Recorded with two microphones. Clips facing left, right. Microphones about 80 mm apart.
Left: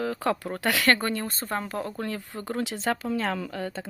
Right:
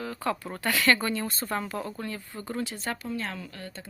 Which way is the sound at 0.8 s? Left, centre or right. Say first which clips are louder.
Right 1 dB; left.